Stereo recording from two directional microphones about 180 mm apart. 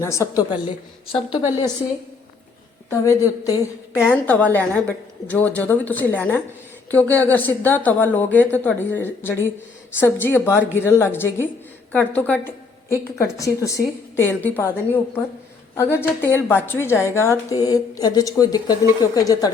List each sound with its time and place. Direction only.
0.0 s a woman's voice: 15° left (ahead or behind)
1.1 s a woman's voice: 30° left (ahead or behind)
2.9 s a woman's voice: 15° left (ahead or behind)
15.7 s a woman's voice: 15° left (ahead or behind)